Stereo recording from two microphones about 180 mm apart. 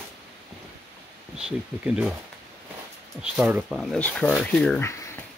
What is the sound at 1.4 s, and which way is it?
Speech, 5° right (ahead or behind).